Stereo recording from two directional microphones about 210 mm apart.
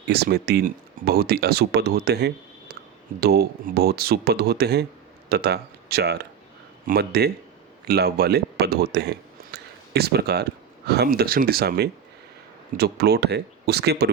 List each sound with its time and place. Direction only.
0.1 s speech: 50° right (ahead or behind)